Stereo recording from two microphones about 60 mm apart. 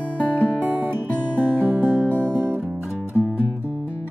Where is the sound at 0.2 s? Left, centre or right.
Right.